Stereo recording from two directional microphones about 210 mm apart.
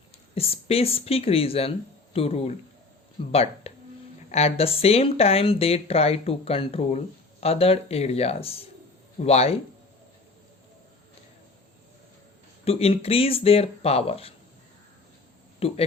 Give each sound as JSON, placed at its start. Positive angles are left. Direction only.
{"t": 0.3, "sound": "speech", "side_deg": 30}
{"t": 12.6, "sound": "speech", "side_deg": 30}
{"t": 15.6, "sound": "speech", "side_deg": 25}